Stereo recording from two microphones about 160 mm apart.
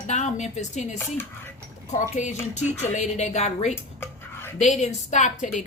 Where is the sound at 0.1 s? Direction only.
45° left (ahead or behind).